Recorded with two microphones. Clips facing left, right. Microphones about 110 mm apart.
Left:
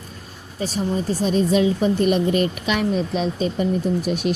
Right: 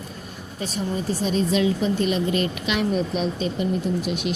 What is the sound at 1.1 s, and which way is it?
A woman's voice, 40° left (ahead or behind).